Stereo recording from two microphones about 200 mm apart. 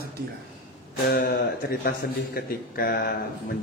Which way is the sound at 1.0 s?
45° left (ahead or behind).